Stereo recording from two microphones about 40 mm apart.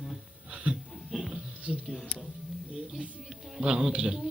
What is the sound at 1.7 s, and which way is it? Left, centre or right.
Speech, centre.